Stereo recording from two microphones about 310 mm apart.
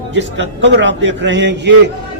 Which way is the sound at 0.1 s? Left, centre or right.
Right.